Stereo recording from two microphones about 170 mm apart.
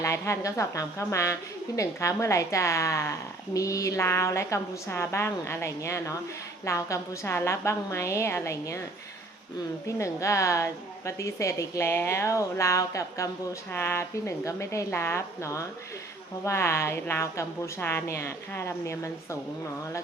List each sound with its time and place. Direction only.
0.0 s a woman's voice: 15° left (ahead or behind)
10.0 s a woman's voice: 20° left (ahead or behind)